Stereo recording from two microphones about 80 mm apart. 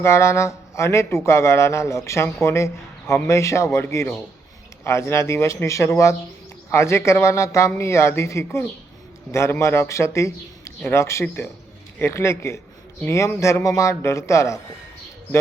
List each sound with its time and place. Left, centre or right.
0.0 s a man's voice: left